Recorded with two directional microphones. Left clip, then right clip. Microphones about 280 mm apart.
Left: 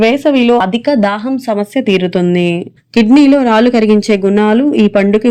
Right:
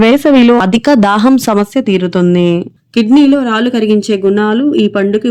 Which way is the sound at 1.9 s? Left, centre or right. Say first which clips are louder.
Even; centre.